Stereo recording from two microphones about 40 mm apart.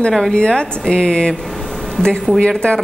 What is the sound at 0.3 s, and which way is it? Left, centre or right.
Speech, left.